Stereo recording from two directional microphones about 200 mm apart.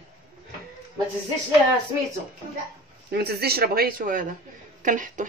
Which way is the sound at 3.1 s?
50° right (ahead or behind).